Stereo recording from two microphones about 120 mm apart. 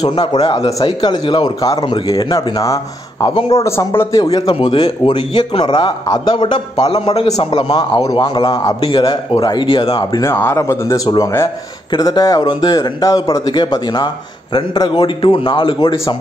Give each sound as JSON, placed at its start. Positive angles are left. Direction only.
{"t": 0.2, "sound": "a man's voice", "side_deg": 60}
{"t": 0.8, "sound": "speech", "side_deg": 40}
{"t": 4.2, "sound": "a man's voice", "side_deg": 35}
{"t": 7.6, "sound": "speech", "side_deg": 40}
{"t": 8.8, "sound": "a man's voice", "side_deg": 50}
{"t": 10.2, "sound": "speech", "side_deg": 20}
{"t": 11.9, "sound": "speech", "side_deg": 35}